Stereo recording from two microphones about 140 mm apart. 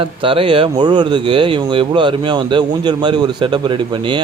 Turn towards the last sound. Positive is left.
turn(degrees=-35)  # may be behind; listen again after turning